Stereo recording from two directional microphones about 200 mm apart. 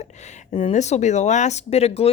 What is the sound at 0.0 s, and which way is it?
A woman's voice, 35° left (ahead or behind).